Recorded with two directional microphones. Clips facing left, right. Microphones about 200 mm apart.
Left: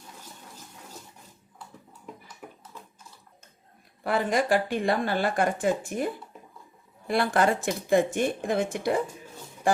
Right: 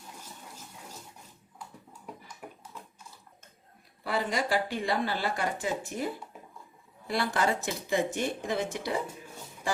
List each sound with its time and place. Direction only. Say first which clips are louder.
4.0 s speech: left 5 dB; 50° left (ahead or behind)
7.1 s speech: left 5 dB; 55° left (ahead or behind)